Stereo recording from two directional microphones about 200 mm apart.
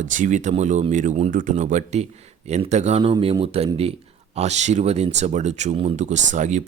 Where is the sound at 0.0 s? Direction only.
40° right (ahead or behind).